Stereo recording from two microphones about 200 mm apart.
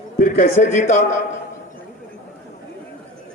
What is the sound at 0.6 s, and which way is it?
Speech, 35° left (ahead or behind).